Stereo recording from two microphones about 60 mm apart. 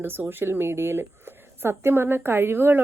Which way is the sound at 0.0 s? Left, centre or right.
Right.